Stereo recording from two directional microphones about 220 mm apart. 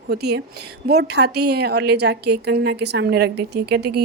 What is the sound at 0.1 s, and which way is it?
A woman's voice, 45° right (ahead or behind).